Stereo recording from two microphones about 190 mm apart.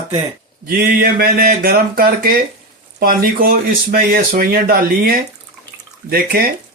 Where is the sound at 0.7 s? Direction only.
55° right (ahead or behind).